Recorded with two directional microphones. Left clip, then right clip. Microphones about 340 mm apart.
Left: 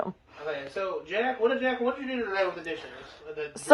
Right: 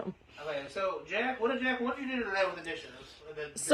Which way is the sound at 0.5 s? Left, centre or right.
Right.